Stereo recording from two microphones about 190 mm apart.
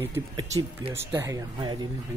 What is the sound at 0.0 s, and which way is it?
Speech, 20° right (ahead or behind).